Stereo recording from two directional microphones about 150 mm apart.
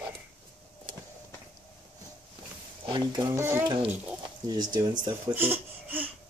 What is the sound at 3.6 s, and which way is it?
Speech, 35° right (ahead or behind).